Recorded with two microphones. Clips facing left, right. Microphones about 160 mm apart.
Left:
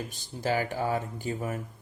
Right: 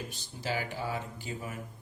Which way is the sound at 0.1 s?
45° left (ahead or behind).